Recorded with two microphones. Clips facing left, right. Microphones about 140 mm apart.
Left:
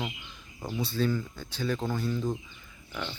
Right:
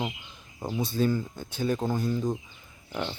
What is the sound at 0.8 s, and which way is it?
Speech, 45° right (ahead or behind).